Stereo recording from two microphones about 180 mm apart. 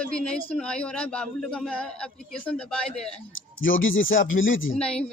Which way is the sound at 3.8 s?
90° left.